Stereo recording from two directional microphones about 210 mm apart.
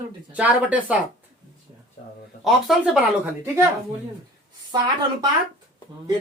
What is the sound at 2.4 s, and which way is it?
Speech, centre (ahead or behind).